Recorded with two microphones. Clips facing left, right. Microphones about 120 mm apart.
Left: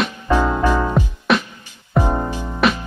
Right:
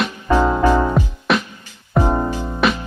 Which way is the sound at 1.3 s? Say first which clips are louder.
Left 1 dB; centre (ahead or behind).